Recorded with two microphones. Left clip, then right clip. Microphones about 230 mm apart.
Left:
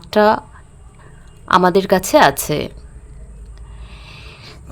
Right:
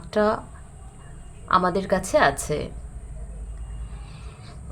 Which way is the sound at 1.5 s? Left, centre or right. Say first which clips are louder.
Left 8 dB; left.